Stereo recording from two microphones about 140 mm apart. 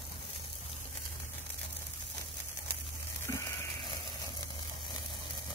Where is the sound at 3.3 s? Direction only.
25° left (ahead or behind).